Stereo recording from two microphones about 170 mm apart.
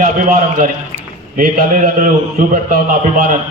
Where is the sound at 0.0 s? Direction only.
50° right (ahead or behind).